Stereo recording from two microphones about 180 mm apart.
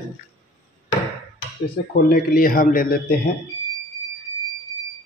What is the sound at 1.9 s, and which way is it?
A man's voice, 55° left (ahead or behind).